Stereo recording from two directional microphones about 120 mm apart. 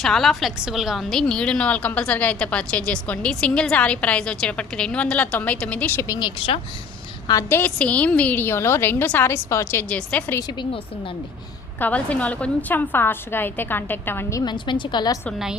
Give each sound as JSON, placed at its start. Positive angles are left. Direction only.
{"t": 0.0, "sound": "a woman's voice", "side_deg": 0}
{"t": 6.0, "sound": "a woman's voice", "side_deg": 30}
{"t": 7.5, "sound": "a woman's voice", "side_deg": 15}
{"t": 9.9, "sound": "a woman's voice", "side_deg": 10}
{"t": 11.8, "sound": "a woman's voice", "side_deg": 10}
{"t": 14.4, "sound": "a woman's voice", "side_deg": 40}